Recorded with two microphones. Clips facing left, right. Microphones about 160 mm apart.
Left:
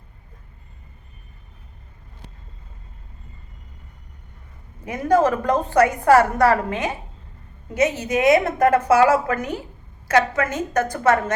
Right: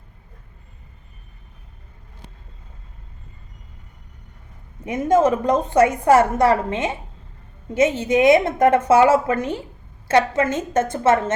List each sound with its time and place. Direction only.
4.9 s a woman's voice: 20° right (ahead or behind)